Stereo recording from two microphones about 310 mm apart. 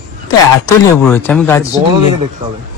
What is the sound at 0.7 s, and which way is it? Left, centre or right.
A man's voice, centre.